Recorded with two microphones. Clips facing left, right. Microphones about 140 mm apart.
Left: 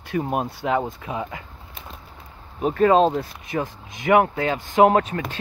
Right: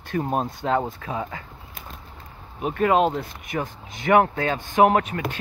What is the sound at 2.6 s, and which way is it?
Speech, 35° left (ahead or behind).